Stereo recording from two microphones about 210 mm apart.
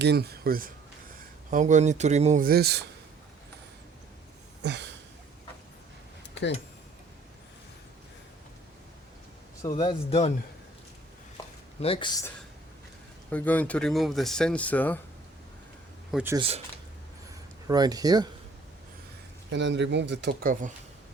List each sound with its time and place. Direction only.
0.0 s speech: 50° right (ahead or behind)
4.6 s a sound: 55° right (ahead or behind)
9.6 s speech: 20° left (ahead or behind)
11.8 s speech: 25° left (ahead or behind)
13.3 s speech: 5° left (ahead or behind)
16.1 s speech: 10° right (ahead or behind)
17.7 s speech: 20° right (ahead or behind)
19.5 s speech: 60° right (ahead or behind)
20.5 s speech: 40° right (ahead or behind)